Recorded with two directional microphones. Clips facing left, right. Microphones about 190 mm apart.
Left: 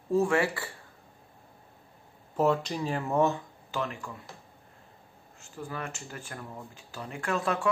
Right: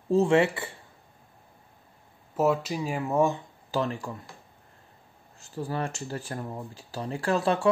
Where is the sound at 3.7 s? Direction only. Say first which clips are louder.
Right 5 dB; 35° right (ahead or behind).